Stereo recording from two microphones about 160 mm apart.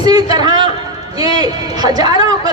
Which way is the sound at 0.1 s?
25° right (ahead or behind).